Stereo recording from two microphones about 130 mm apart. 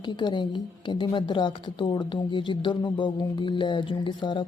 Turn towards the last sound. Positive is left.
turn(degrees=35)  # may be behind; listen again after turning